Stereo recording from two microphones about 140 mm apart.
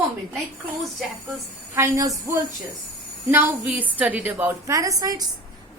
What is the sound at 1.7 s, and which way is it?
A woman's voice, 20° right (ahead or behind).